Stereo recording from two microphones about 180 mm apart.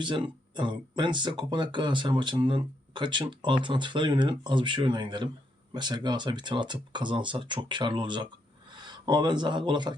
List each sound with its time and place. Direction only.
0.0 s speech: 25° right (ahead or behind)